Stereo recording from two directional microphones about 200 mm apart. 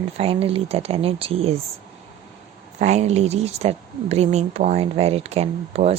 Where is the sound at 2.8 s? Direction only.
35° right (ahead or behind).